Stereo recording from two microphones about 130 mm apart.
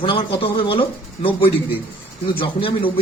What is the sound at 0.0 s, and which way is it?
Speech, 40° left (ahead or behind).